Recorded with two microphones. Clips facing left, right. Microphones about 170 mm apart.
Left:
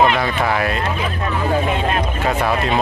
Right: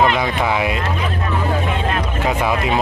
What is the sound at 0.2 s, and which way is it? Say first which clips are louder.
Speech: even; 15° right (ahead or behind).